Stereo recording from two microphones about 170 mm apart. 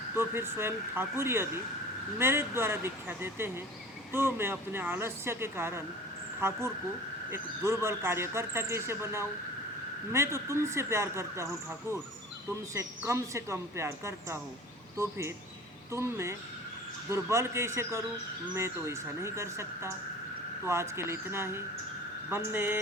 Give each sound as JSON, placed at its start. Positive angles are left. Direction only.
{"t": 0.2, "sound": "speech", "side_deg": -15}
{"t": 12.5, "sound": "speech", "side_deg": -15}